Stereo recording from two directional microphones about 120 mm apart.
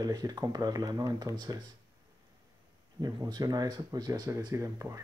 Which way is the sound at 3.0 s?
35° right (ahead or behind).